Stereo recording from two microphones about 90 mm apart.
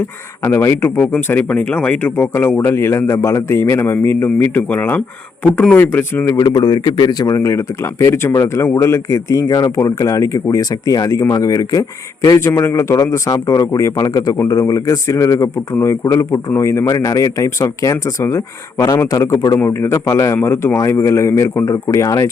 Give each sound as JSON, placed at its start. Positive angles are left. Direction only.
{"t": 0.4, "sound": "speech", "side_deg": 25}
{"t": 6.3, "sound": "speech", "side_deg": 50}
{"t": 16.8, "sound": "speech", "side_deg": 40}
{"t": 21.5, "sound": "speech", "side_deg": 45}